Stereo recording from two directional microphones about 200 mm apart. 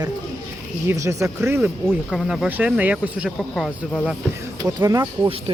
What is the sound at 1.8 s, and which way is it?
Speech, centre (ahead or behind).